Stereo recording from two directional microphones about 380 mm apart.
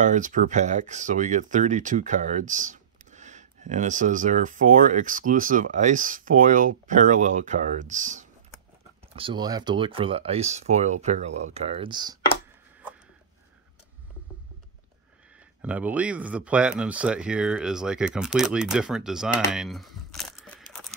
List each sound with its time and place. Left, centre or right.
0.0 s speech: centre
15.6 s speech: centre